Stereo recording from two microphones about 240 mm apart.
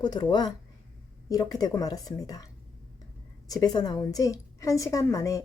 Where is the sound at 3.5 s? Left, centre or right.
Centre.